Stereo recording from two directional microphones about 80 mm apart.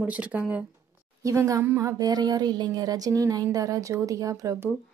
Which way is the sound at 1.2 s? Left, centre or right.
Right.